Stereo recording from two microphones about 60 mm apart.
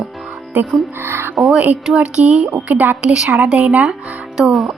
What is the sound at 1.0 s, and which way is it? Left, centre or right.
Speech, right.